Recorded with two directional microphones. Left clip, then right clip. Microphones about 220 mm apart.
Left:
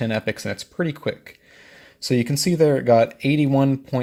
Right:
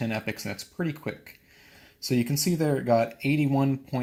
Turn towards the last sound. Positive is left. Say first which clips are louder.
# left 7 dB
turn(degrees=45)  # may be behind; listen again after turning